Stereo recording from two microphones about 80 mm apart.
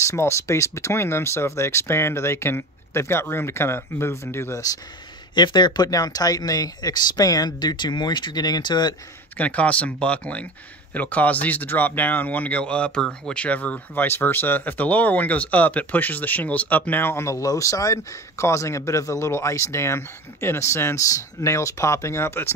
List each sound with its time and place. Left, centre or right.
0.0 s speech: left
5.3 s speech: left
5.9 s speech: left
9.4 s speech: centre